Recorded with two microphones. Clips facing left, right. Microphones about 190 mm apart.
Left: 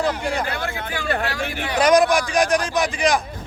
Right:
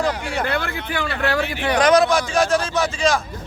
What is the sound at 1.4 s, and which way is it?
Speech, 50° left (ahead or behind).